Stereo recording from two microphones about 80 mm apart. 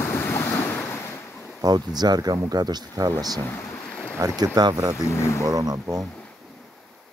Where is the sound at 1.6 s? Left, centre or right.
Right.